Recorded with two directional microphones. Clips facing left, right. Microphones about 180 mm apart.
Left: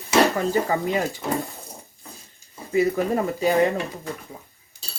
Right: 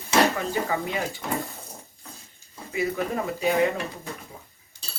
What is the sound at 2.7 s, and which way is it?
Speech, 35° left (ahead or behind).